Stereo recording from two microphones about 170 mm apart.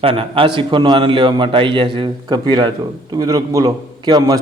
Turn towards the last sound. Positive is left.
turn(degrees=-20)  # may be behind; listen again after turning